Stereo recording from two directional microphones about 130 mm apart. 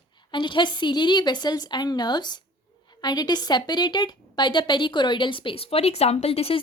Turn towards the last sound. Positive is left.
turn(degrees=50)  # may be behind; listen again after turning